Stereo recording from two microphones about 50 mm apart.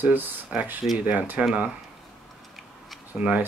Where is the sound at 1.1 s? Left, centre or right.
Right.